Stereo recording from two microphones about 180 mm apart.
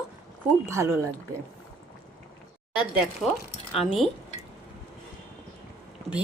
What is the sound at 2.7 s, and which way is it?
Speech, 5° right (ahead or behind).